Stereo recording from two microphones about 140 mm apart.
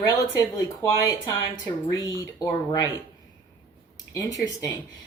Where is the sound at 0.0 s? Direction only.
25° left (ahead or behind).